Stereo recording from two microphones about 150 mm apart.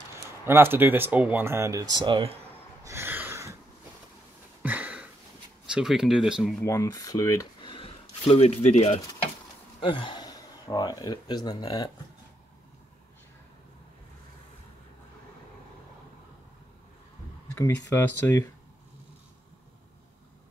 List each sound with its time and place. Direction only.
0.5 s speech: 15° right (ahead or behind); by 2.3 s 30° right (ahead or behind)
2.8 s a sound: 15° right (ahead or behind)
4.6 s a sound: 10° right (ahead or behind)
5.7 s speech: 5° right (ahead or behind)
6.6 s speech: 20° left (ahead or behind)
7.7 s speech: 40° left (ahead or behind)
9.8 s speech: 35° left (ahead or behind)
17.5 s speech: 20° left (ahead or behind)